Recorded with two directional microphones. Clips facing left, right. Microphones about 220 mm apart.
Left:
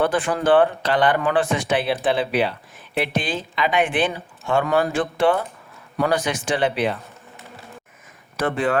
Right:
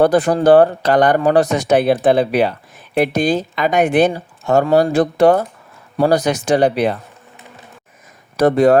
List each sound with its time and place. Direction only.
0.0 s speech: 40° right (ahead or behind)
8.4 s speech: 40° right (ahead or behind)